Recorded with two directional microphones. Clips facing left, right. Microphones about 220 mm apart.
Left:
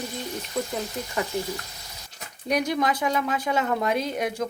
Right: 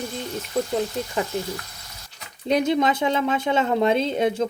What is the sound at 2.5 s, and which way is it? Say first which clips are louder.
Speech: right 4 dB; 25° right (ahead or behind).